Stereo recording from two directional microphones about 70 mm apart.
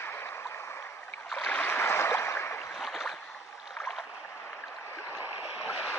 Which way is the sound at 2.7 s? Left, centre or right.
Centre.